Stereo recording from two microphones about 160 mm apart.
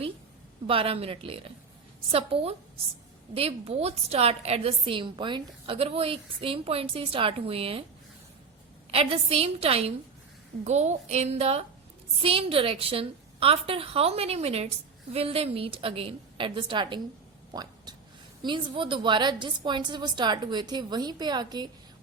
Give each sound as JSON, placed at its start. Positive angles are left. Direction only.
{"t": 0.7, "sound": "a woman's voice", "side_deg": -35}
{"t": 8.9, "sound": "a woman's voice", "side_deg": -35}
{"t": 17.5, "sound": "a sound", "side_deg": -25}
{"t": 18.4, "sound": "a woman's voice", "side_deg": -30}